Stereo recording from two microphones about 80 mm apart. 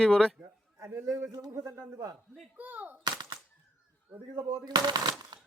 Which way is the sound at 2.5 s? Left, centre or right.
Right.